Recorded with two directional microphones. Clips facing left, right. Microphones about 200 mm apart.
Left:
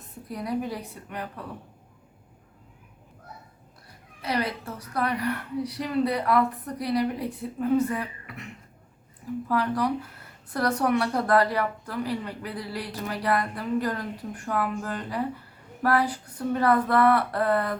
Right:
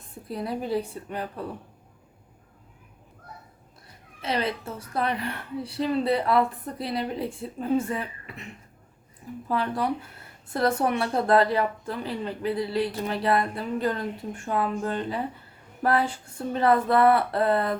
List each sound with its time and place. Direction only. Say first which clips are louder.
0.3 s a woman's voice: right 1 dB; 30° right (ahead or behind)
4.2 s a woman's voice: right 1 dB; 25° right (ahead or behind)
9.5 s a woman's voice: left 1 dB; 25° right (ahead or behind)